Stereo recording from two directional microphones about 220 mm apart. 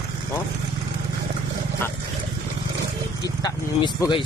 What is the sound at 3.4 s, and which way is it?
Speech, 20° left (ahead or behind).